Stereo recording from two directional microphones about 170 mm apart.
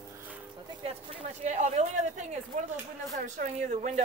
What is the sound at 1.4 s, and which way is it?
Speech, 45° right (ahead or behind).